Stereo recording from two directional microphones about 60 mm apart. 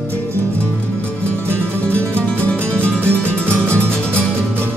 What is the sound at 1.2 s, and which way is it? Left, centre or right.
Music, right.